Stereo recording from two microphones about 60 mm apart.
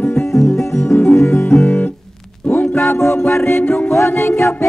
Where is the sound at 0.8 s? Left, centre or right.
Left.